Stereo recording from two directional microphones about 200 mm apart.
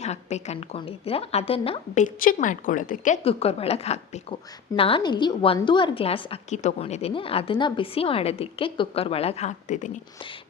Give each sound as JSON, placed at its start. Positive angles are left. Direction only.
{"t": 0.0, "sound": "a woman's voice", "side_deg": 35}